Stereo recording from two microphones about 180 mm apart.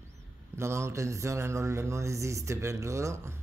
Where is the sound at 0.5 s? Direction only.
15° right (ahead or behind).